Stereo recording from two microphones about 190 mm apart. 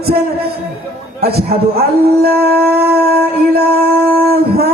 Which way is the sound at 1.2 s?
55° right (ahead or behind).